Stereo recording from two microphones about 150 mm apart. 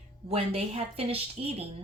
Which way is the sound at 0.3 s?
40° right (ahead or behind).